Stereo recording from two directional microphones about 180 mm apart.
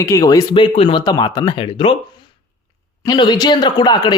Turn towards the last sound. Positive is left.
turn(degrees=25)  # may be behind; listen again after turning